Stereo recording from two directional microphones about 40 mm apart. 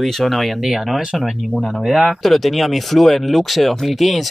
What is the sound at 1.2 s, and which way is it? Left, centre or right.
Speech, centre.